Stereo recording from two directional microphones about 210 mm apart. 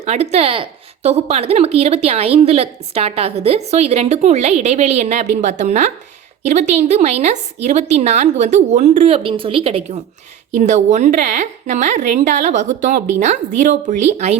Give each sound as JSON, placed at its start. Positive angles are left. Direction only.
{"t": 0.0, "sound": "a woman's voice", "side_deg": -30}